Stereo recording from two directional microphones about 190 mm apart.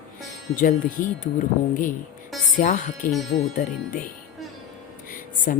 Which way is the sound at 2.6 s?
45° left (ahead or behind).